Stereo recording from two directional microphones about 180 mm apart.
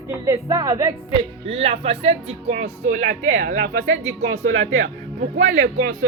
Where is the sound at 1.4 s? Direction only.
35° right (ahead or behind); by 3.7 s 50° right (ahead or behind).